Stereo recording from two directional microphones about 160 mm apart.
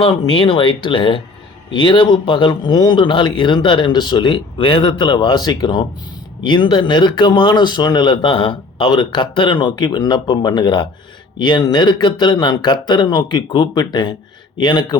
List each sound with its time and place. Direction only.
0.0 s speech: 35° left (ahead or behind)